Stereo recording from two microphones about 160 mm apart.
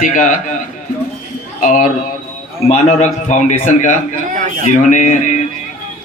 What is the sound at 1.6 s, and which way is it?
A man's voice, 50° left (ahead or behind).